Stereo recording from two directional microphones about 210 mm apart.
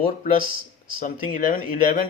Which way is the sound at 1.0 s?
40° left (ahead or behind).